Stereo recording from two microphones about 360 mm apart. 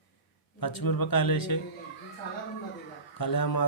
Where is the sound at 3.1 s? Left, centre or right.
Left.